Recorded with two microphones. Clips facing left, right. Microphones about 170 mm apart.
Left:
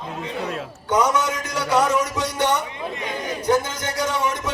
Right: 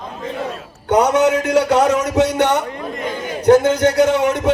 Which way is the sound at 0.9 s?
60° right (ahead or behind).